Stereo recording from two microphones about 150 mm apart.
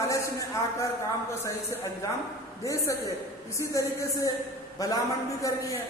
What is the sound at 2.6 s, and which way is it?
A woman's voice, 20° left (ahead or behind).